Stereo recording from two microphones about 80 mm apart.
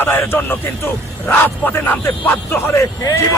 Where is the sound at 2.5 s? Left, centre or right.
Left.